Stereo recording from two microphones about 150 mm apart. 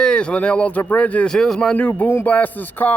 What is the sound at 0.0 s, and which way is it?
Speech, 5° left (ahead or behind).